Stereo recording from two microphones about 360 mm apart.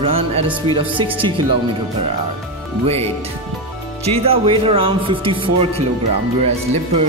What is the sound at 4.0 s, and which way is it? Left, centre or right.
Speech, centre.